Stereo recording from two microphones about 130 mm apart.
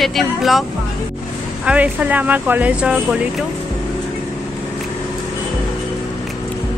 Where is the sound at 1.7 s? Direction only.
15° right (ahead or behind).